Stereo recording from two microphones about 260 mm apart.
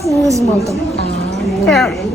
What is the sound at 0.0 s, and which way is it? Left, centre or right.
Speech, centre.